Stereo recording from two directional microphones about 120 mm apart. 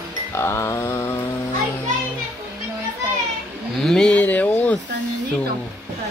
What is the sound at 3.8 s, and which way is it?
Speech, 5° left (ahead or behind).